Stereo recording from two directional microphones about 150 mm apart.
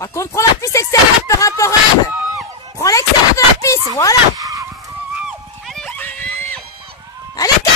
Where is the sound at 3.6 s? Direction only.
20° left (ahead or behind).